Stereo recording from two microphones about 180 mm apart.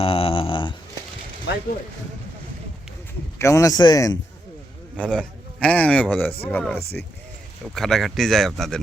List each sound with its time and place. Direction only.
0.0 s a sound: 30° left (ahead or behind)
1.5 s speech: 80° left
3.3 s speech: 15° left (ahead or behind)
4.9 s a man's voice: 5° left (ahead or behind)